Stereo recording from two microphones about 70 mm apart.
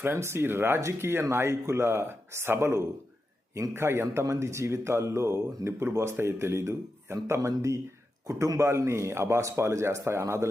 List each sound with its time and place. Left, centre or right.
0.0 s speech: right